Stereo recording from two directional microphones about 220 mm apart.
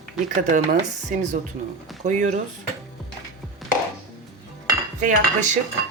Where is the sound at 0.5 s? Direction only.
35° right (ahead or behind).